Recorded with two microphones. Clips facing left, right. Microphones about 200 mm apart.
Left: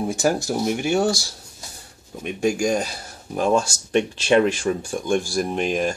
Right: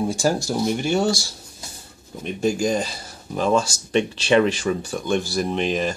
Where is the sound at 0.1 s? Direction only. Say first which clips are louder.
Even; 20° left (ahead or behind).